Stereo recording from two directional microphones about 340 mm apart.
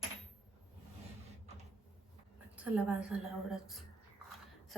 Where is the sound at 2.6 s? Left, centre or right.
Centre.